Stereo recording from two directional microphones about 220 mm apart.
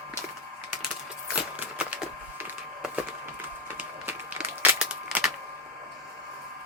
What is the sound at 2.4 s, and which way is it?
Wood, 5° right (ahead or behind).